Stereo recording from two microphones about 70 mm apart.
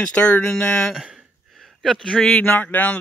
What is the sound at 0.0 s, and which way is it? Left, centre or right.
Speech, centre.